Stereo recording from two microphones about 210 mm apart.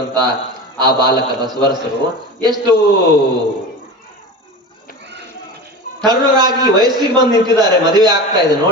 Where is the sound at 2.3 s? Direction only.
20° right (ahead or behind).